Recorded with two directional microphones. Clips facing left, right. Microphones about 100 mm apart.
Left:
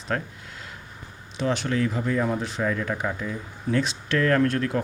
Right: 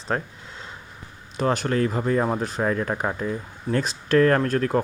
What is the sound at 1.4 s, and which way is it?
Speech, 45° right (ahead or behind).